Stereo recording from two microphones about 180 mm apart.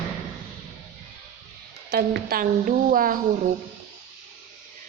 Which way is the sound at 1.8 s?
60° right (ahead or behind).